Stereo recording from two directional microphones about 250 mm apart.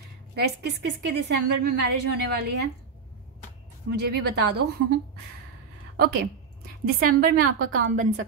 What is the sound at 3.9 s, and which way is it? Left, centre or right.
A woman's voice, right.